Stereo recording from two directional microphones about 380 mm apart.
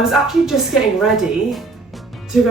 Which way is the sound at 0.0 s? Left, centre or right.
Centre.